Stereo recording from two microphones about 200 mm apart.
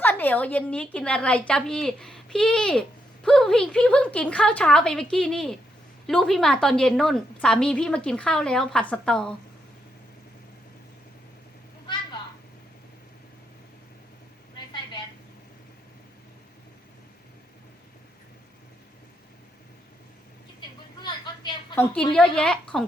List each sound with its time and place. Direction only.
0.0 s a woman's voice: 10° left (ahead or behind)
20.6 s a sound: 25° left (ahead or behind)
21.8 s a woman's voice: 5° left (ahead or behind)